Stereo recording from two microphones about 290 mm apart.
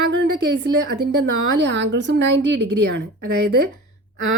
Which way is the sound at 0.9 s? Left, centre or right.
Right.